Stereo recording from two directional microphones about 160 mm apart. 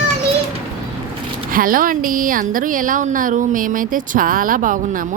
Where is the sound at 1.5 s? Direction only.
60° right (ahead or behind).